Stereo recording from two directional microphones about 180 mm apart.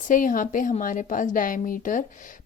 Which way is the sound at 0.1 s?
50° left (ahead or behind).